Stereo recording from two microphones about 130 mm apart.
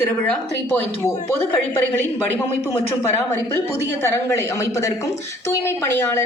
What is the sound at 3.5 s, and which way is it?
A woman's voice, 20° left (ahead or behind).